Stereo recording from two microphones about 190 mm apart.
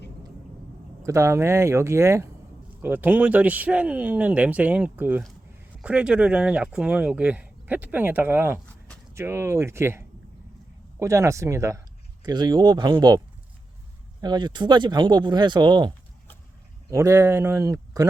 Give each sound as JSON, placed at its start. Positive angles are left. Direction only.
{"t": 1.0, "sound": "speech", "side_deg": -15}
{"t": 16.9, "sound": "speech", "side_deg": -15}